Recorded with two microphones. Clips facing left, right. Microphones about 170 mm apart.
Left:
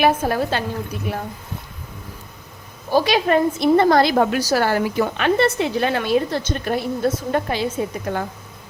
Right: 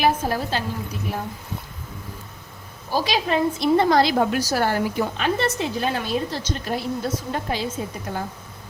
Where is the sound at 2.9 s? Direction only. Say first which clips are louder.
Left 5 dB; 60° left (ahead or behind).